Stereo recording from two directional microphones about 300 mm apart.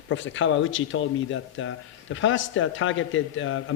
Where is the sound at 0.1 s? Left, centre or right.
Left.